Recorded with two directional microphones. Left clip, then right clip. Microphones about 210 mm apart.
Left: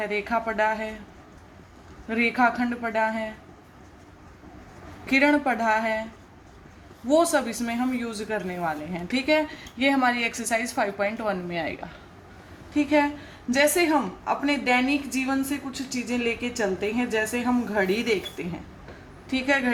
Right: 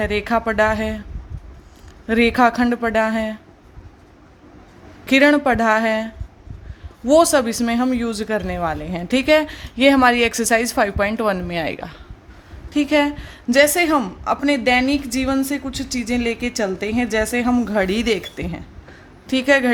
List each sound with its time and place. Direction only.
0.0 s a woman's voice: 55° right (ahead or behind)
2.0 s a woman's voice: 55° right (ahead or behind)
5.0 s a woman's voice: 55° right (ahead or behind)
7.1 s a woman's voice: 55° right (ahead or behind)